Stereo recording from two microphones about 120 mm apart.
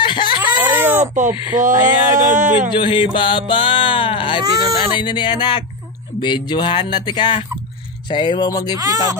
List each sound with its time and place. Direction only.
0.0 s a sound: 40° left (ahead or behind)
0.4 s a sound: 15° right (ahead or behind)
1.5 s speech: 90° right
2.7 s speech: 45° left (ahead or behind)
4.4 s speech: 30° right (ahead or behind)
4.9 s speech: 40° left (ahead or behind)
8.7 s speech: 30° right (ahead or behind)